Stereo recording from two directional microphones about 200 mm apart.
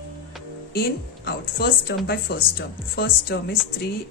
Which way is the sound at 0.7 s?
50° left (ahead or behind).